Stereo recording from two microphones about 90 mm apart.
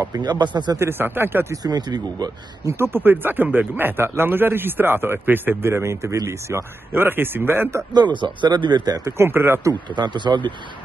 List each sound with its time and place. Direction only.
0.0 s speech: 50° right (ahead or behind)
0.7 s a man's voice: 25° right (ahead or behind)
1.5 s speech: 50° right (ahead or behind)
2.8 s a man's voice: 25° right (ahead or behind)
7.9 s speech: 60° right (ahead or behind)
9.2 s a man's voice: 25° right (ahead or behind)
9.9 s speech: 60° right (ahead or behind)